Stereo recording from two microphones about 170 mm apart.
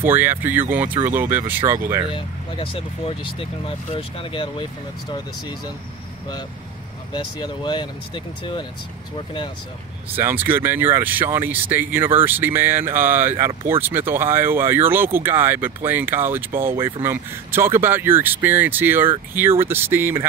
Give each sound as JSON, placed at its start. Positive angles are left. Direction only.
{"t": 0.0, "sound": "speech", "side_deg": -10}
{"t": 2.1, "sound": "speech", "side_deg": 30}
{"t": 7.3, "sound": "speech", "side_deg": 25}
{"t": 10.1, "sound": "speech", "side_deg": -10}